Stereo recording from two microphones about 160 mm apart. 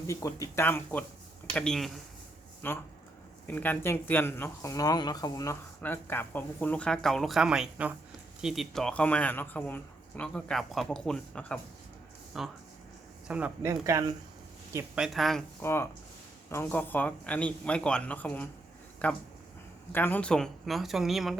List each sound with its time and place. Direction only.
0.1 s speech: 20° left (ahead or behind); by 13.5 s 5° right (ahead or behind)
13.6 s speech: 20° right (ahead or behind)
14.9 s speech: centre (ahead or behind)
15.6 s speech: 15° left (ahead or behind); by 21.3 s centre (ahead or behind)